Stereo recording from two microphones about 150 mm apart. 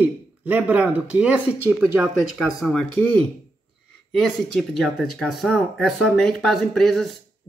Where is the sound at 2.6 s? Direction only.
5° left (ahead or behind).